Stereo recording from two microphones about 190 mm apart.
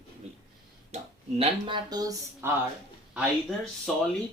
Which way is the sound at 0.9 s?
30° right (ahead or behind).